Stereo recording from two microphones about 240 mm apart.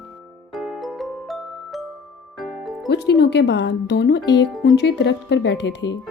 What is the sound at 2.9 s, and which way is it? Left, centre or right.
Speech, left.